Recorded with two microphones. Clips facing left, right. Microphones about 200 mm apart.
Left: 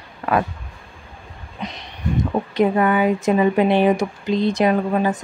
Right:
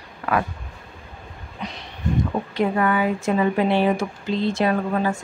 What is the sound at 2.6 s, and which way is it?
Speech, 20° left (ahead or behind).